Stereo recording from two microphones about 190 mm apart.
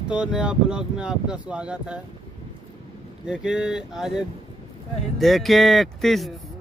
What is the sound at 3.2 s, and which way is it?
Speech, 5° right (ahead or behind).